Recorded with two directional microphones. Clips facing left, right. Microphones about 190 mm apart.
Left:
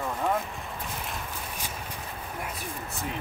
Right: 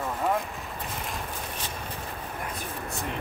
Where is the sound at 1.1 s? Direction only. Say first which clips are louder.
Right 2 dB; 10° left (ahead or behind).